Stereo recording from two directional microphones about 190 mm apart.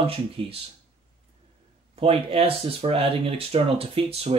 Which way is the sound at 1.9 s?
30° right (ahead or behind).